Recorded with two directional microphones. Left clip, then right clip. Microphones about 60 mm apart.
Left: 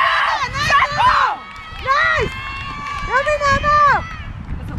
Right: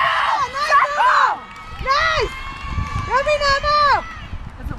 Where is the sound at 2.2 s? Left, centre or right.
Left.